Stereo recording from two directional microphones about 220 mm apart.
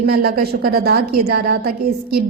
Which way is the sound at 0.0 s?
45° right (ahead or behind).